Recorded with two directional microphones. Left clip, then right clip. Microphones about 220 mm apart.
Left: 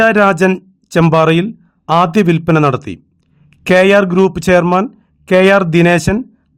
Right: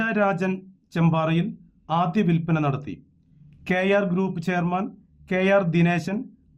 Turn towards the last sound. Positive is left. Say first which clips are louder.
# left 14 dB
turn(degrees=50)  # may be behind; listen again after turning